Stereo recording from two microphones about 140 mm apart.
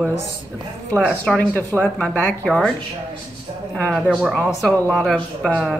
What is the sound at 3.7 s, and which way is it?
Speech, 10° left (ahead or behind).